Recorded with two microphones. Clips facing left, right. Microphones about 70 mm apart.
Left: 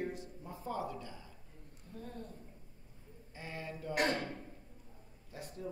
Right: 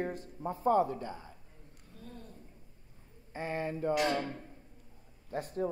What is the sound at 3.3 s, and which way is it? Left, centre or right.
Speech, right.